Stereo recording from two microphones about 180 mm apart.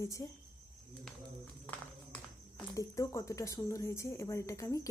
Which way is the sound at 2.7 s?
20° left (ahead or behind).